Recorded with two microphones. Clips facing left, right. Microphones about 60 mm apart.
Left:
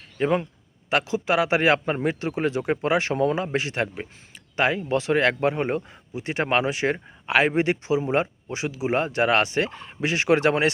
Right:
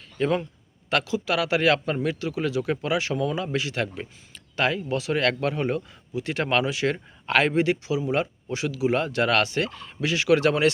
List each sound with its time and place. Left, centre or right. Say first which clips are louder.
0.2 s a man's voice: left 1 dB; left
7.3 s speech: left 1 dB; centre
7.5 s speech: left 1 dB; left